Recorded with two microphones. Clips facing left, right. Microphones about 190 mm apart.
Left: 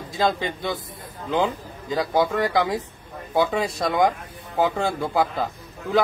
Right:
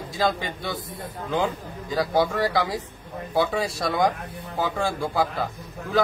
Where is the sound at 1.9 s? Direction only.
20° left (ahead or behind).